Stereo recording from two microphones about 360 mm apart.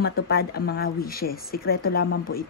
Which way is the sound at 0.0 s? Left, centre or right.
Left.